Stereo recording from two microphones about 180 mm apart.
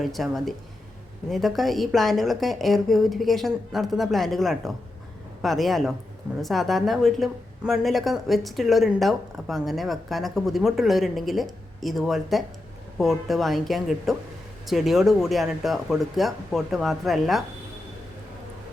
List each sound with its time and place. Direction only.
0.0 s a woman's voice: centre (ahead or behind)